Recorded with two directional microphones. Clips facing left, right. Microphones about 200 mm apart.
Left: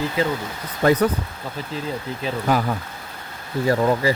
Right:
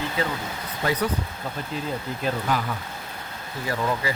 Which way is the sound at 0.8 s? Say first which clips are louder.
Left 8 dB; 45° left (ahead or behind).